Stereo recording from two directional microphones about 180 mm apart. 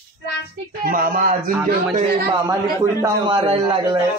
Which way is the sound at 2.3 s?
20° right (ahead or behind).